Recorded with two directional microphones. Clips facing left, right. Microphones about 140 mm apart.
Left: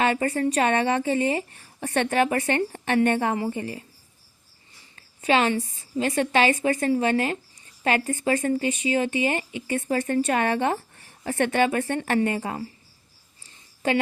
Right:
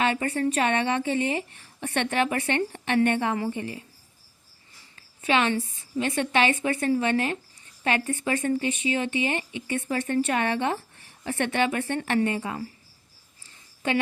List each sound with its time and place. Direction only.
0.0 s a woman's voice: 35° left (ahead or behind)
4.9 s a sound: 35° left (ahead or behind)
6.0 s a woman's voice: 35° left (ahead or behind)